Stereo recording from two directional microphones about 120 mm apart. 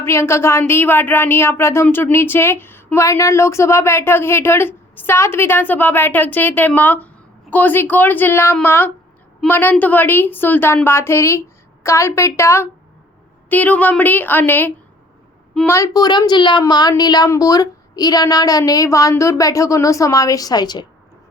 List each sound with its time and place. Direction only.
0.0 s a woman's voice: 20° left (ahead or behind)